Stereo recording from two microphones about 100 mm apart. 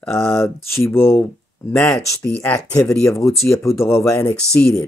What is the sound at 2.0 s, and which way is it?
Speech, 15° left (ahead or behind).